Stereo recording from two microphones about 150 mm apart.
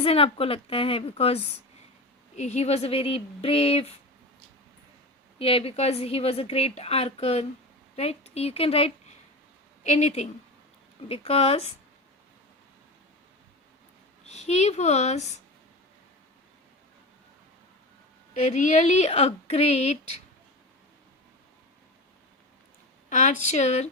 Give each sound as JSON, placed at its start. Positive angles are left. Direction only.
{"t": 0.0, "sound": "a woman's voice", "side_deg": 40}
{"t": 5.4, "sound": "a woman's voice", "side_deg": 40}
{"t": 14.3, "sound": "a woman's voice", "side_deg": 50}
{"t": 18.3, "sound": "a woman's voice", "side_deg": 50}
{"t": 23.0, "sound": "a woman's voice", "side_deg": 55}